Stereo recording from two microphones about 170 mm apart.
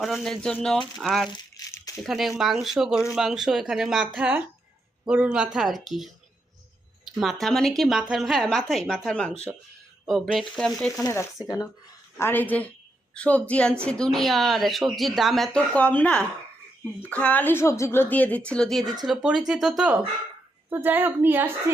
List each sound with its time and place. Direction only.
0.0 s speech: centre (ahead or behind)
1.3 s crumpling: 20° left (ahead or behind)
2.0 s speech: centre (ahead or behind)
7.2 s speech: centre (ahead or behind)
11.0 s a woman's voice: 15° left (ahead or behind); by 21.5 s 10° right (ahead or behind)